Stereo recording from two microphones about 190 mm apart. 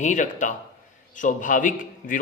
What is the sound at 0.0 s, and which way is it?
A man's voice, 40° left (ahead or behind).